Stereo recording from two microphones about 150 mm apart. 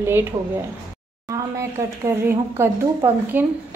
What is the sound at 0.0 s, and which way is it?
Speech, 15° right (ahead or behind).